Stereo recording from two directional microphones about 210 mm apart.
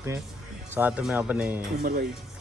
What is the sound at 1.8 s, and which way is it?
Speech, 45° right (ahead or behind).